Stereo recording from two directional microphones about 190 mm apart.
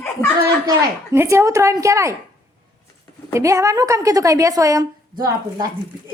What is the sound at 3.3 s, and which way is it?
A woman's voice, 15° right (ahead or behind).